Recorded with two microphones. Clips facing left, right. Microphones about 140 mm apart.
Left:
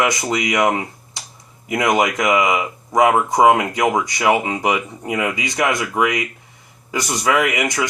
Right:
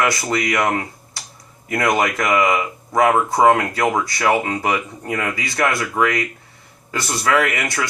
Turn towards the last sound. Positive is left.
turn(degrees=15)  # may be behind; listen again after turning